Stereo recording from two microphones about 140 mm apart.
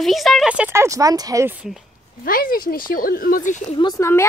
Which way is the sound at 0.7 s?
20° right (ahead or behind).